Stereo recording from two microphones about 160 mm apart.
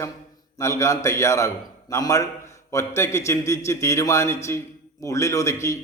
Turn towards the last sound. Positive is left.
turn(degrees=20)  # may be behind; listen again after turning